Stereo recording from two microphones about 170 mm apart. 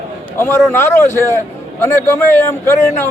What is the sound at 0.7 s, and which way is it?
A man's voice, 15° left (ahead or behind).